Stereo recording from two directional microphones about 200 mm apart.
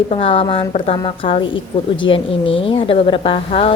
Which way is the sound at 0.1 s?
25° left (ahead or behind).